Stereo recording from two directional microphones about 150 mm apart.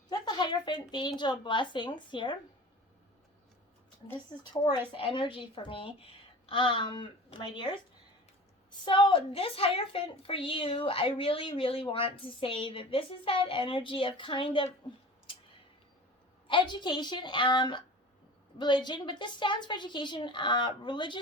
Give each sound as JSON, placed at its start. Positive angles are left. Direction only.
{"t": 0.1, "sound": "speech", "side_deg": 30}
{"t": 4.5, "sound": "a woman's voice", "side_deg": 25}
{"t": 8.8, "sound": "a woman's voice", "side_deg": 35}
{"t": 16.5, "sound": "a woman's voice", "side_deg": 30}